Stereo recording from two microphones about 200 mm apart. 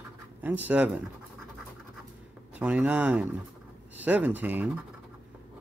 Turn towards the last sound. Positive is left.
turn(degrees=-10)  # may be behind; listen again after turning